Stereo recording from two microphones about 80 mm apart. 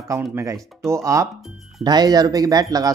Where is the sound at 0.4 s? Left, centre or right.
Right.